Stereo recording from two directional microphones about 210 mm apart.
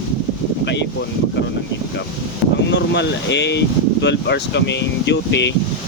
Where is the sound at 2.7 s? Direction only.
55° left (ahead or behind).